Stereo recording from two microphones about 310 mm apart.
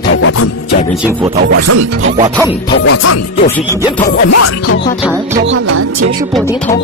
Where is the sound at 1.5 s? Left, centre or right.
Right.